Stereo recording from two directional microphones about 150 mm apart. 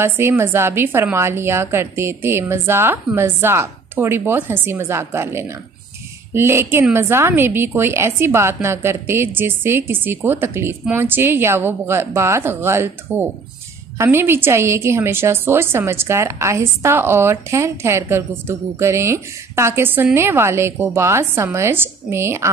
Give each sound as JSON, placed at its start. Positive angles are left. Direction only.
{"t": 0.0, "sound": "a woman's voice", "side_deg": -15}